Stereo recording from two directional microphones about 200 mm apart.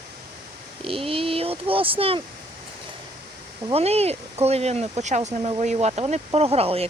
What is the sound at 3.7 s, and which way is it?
Speech, 30° right (ahead or behind).